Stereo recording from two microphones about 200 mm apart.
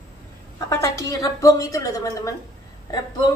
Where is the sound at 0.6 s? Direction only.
15° left (ahead or behind).